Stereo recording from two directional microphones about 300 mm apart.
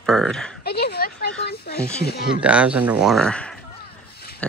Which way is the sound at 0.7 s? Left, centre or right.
Left.